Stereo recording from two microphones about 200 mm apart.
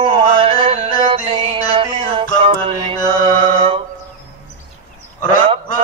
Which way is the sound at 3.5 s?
30° right (ahead or behind).